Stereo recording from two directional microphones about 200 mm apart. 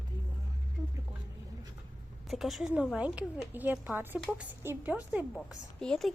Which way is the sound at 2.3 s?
Centre (ahead or behind).